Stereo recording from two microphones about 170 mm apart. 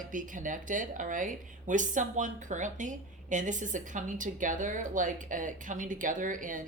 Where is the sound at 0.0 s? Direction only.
50° right (ahead or behind).